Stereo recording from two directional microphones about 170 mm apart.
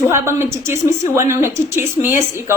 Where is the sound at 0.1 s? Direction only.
15° right (ahead or behind).